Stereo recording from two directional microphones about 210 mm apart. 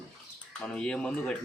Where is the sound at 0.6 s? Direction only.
5° left (ahead or behind).